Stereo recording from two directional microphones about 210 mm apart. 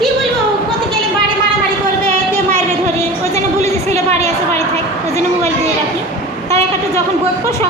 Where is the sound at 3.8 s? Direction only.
30° right (ahead or behind).